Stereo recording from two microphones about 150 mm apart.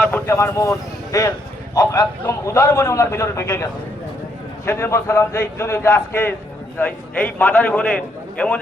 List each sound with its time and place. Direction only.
0.0 s a man's voice: 15° left (ahead or behind)